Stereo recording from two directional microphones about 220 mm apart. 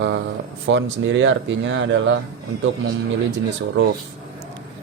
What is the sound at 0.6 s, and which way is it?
Speech, 60° right (ahead or behind).